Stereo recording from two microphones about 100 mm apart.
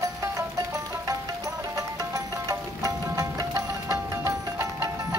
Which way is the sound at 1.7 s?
35° right (ahead or behind).